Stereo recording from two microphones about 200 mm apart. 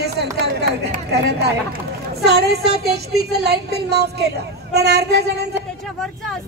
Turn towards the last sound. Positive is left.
turn(degrees=-55)  # may be behind; listen again after turning